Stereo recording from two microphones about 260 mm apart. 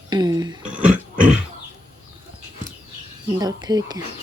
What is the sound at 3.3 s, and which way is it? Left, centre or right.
Speech, centre.